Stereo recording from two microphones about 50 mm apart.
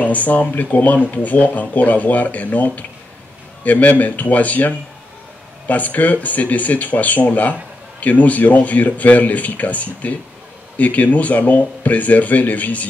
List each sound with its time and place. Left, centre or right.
0.0 s speech: left